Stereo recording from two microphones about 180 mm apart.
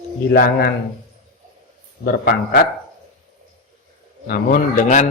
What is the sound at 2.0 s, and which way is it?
Speech, 60° left (ahead or behind).